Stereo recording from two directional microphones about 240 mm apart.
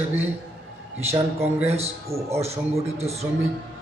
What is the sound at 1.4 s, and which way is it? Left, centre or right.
A man's voice, centre.